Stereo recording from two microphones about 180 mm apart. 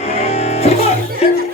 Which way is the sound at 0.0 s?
35° left (ahead or behind).